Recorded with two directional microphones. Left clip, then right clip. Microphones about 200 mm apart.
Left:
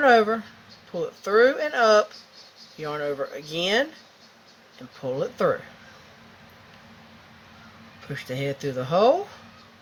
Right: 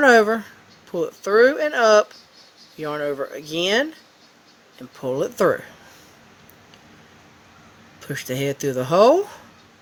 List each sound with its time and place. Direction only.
0.0 s speech: 60° right (ahead or behind)
4.9 s speech: 60° right (ahead or behind)
8.0 s speech: 60° right (ahead or behind)